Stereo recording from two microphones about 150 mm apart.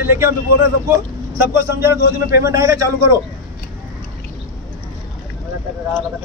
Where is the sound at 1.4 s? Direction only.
15° right (ahead or behind).